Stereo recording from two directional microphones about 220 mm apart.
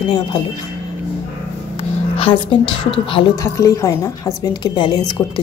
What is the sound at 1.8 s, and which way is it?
A woman's voice, 25° left (ahead or behind).